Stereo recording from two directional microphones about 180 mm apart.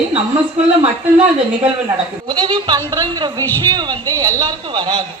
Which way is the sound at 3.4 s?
10° left (ahead or behind).